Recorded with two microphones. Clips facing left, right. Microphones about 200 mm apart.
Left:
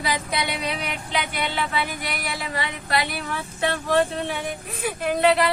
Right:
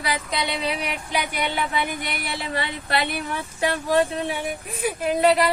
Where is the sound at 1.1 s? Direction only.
15° right (ahead or behind).